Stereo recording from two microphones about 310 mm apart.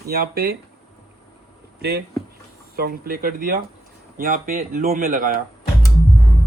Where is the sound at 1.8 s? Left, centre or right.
Right.